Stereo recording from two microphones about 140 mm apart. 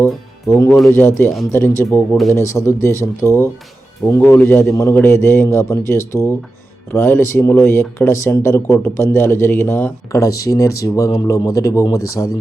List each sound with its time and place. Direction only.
0.0 s speech: 20° left (ahead or behind)